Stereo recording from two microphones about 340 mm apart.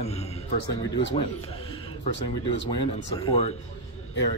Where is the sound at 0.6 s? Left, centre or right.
Left.